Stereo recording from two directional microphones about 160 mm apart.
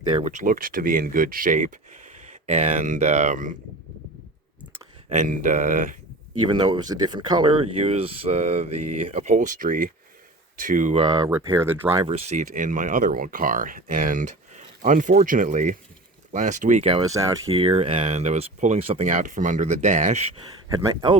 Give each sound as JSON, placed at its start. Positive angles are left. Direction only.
{"t": 0.0, "sound": "speech", "side_deg": -30}
{"t": 0.3, "sound": "speech", "side_deg": -55}
{"t": 5.0, "sound": "speech", "side_deg": -50}
{"t": 6.5, "sound": "speech", "side_deg": -25}
{"t": 10.9, "sound": "speech", "side_deg": -25}
{"t": 11.5, "sound": "speech", "side_deg": -15}
{"t": 12.0, "sound": "speech", "side_deg": -40}
{"t": 12.4, "sound": "speech", "side_deg": -55}
{"t": 16.9, "sound": "speech", "side_deg": -20}
{"t": 17.5, "sound": "speech", "side_deg": -35}
{"t": 20.7, "sound": "speech", "side_deg": -25}